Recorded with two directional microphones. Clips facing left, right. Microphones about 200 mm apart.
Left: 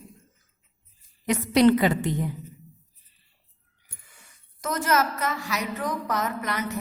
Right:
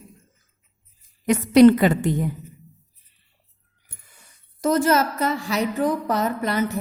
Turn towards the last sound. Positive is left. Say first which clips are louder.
# right 6 dB
turn(degrees=-30)  # may be behind; listen again after turning